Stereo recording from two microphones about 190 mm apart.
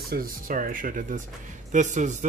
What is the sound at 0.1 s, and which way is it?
Speech, 50° right (ahead or behind).